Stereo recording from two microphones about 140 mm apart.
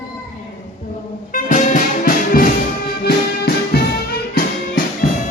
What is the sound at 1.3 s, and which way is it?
Music, 65° left (ahead or behind).